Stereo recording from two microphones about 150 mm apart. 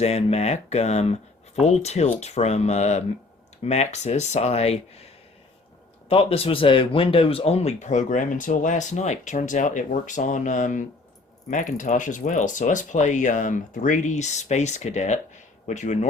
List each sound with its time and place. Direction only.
0.0 s speech: 45° left (ahead or behind)